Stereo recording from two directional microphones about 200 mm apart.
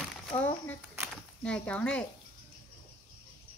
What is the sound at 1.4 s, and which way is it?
Speech, 5° left (ahead or behind).